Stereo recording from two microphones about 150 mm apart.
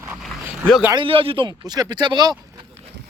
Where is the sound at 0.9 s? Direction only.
35° right (ahead or behind).